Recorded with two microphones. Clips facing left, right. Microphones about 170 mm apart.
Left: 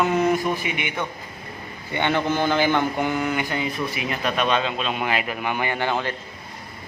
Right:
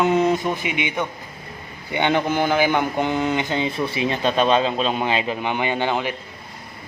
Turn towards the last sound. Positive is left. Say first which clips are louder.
# right 2 dB
turn(degrees=-15)  # may be behind; listen again after turning